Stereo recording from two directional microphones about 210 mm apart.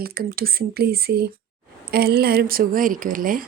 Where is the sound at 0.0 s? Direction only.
45° right (ahead or behind).